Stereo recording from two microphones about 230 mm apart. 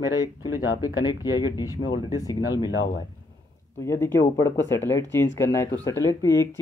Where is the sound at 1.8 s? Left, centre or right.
Left.